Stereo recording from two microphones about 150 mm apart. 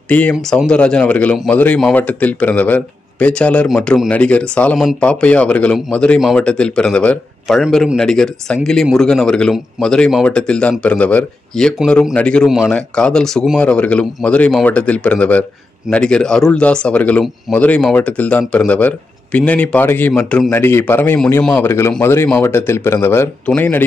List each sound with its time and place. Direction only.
0.1 s speech: 10° left (ahead or behind)